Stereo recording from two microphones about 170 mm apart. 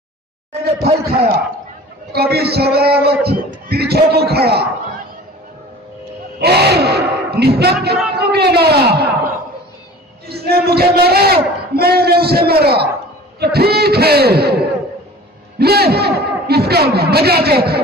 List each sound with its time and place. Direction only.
0.5 s speech: 35° right (ahead or behind)
2.1 s a man's voice: 70° right (ahead or behind)
6.4 s a man's voice: 70° right (ahead or behind)
10.2 s a man's voice: 70° right (ahead or behind)
15.6 s a man's voice: 70° right (ahead or behind)